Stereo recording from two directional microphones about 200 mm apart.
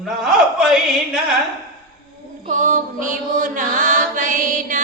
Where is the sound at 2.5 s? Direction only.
40° right (ahead or behind).